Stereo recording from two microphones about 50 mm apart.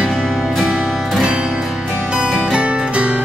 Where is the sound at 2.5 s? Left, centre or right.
Right.